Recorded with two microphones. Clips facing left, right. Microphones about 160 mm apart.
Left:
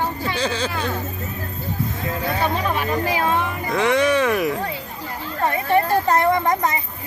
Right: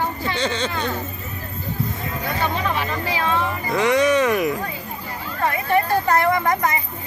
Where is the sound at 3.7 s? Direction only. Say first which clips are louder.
Right 1 dB; centre (ahead or behind).